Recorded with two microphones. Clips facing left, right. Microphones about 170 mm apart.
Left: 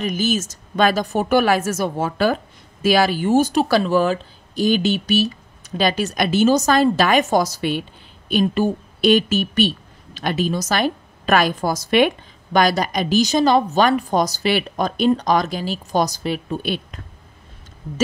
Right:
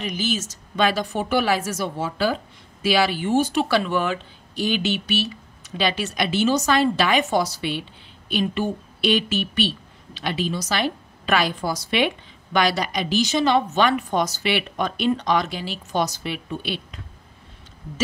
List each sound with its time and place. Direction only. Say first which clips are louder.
0.0 s a woman's voice: left 5 dB; 45° left (ahead or behind)